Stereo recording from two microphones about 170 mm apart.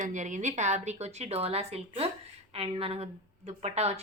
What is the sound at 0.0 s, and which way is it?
A woman's voice, 45° right (ahead or behind).